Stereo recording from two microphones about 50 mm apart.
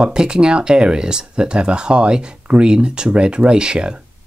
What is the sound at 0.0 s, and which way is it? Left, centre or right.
Speech, centre.